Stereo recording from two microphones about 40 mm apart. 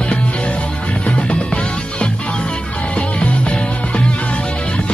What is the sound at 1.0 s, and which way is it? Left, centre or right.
Music, left.